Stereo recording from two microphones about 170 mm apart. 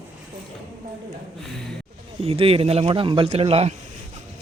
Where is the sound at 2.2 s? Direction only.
35° right (ahead or behind).